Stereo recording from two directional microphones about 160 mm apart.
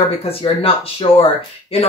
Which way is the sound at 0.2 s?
35° left (ahead or behind).